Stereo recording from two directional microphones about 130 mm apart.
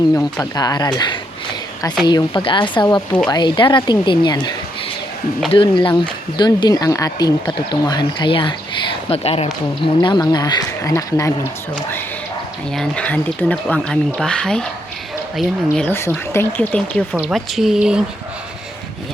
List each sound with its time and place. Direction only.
0.5 s speech: 30° left (ahead or behind)
12.7 s speech: 5° left (ahead or behind)
15.9 s speech: 20° left (ahead or behind)
17.2 s speech: 5° right (ahead or behind)